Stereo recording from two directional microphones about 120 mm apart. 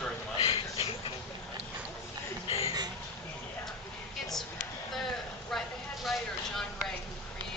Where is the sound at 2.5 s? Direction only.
50° left (ahead or behind).